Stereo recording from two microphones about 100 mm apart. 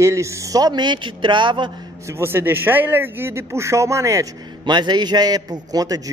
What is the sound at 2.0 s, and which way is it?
Speech, 25° right (ahead or behind).